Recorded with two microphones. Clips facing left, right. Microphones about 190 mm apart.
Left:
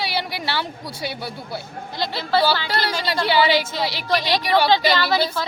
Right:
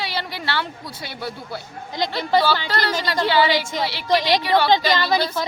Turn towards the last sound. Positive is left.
turn(degrees=-15)  # may be behind; listen again after turning